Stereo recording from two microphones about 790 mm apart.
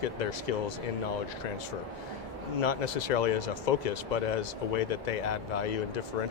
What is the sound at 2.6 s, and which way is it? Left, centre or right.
Speech, left.